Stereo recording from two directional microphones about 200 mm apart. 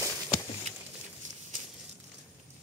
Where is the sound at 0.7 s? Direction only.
30° right (ahead or behind).